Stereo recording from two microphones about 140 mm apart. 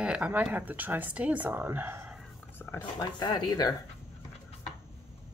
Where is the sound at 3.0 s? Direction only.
30° left (ahead or behind).